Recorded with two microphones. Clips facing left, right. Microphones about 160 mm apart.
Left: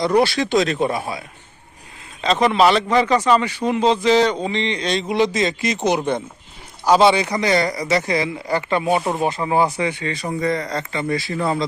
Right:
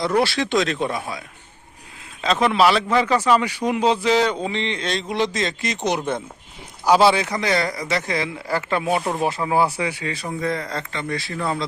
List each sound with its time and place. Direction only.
0.2 s speech: centre (ahead or behind)
0.9 s a man's voice: 25° left (ahead or behind)
2.2 s speech: centre (ahead or behind)